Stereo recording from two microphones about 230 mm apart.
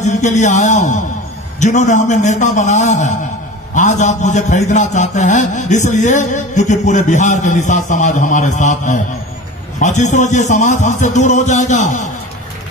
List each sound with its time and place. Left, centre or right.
0.0 s a man's voice: left